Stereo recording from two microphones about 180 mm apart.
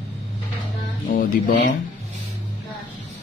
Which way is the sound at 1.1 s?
45° left (ahead or behind).